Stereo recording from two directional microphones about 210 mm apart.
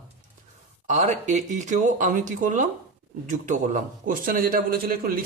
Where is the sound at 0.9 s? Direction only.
35° right (ahead or behind).